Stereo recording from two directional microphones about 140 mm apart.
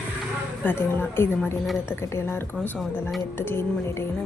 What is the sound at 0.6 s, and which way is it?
A woman's voice, 15° left (ahead or behind).